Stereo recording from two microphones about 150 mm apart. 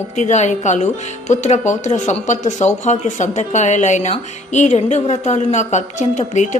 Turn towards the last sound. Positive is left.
turn(degrees=50)  # may be behind; listen again after turning